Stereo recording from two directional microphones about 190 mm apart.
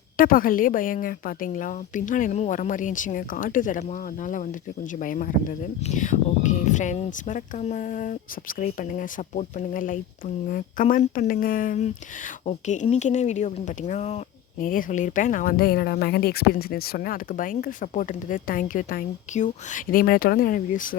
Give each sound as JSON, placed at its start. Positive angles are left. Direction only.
{"t": 0.2, "sound": "speech", "side_deg": 50}